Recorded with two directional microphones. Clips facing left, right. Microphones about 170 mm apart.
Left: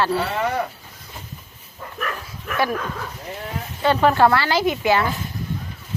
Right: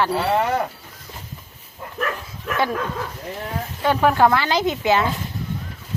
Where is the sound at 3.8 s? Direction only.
10° right (ahead or behind).